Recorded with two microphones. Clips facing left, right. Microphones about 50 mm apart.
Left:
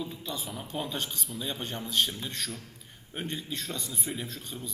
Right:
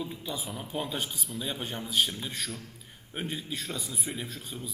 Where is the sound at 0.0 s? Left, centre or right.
Centre.